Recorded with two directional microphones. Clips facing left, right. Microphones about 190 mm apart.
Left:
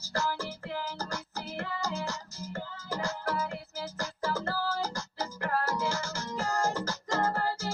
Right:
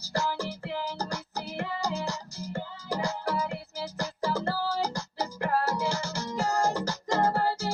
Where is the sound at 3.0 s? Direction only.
15° right (ahead or behind).